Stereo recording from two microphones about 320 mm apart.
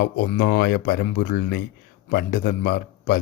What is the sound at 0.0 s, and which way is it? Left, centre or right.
A man's voice, left.